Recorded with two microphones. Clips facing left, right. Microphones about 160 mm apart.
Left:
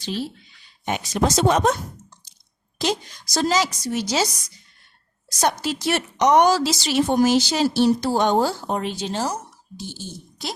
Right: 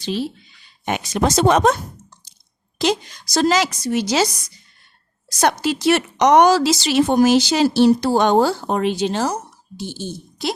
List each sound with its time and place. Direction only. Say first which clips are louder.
0.9 s a woman's voice: right 2 dB; 70° right (ahead or behind)
2.7 s a woman's voice: right 4 dB; 75° right (ahead or behind)
5.4 s a woman's voice: right 4 dB; 75° right (ahead or behind)